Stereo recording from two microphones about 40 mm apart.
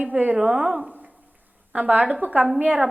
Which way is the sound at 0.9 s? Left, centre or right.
Right.